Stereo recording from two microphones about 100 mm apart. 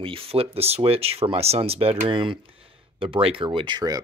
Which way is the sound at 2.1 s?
55° right (ahead or behind).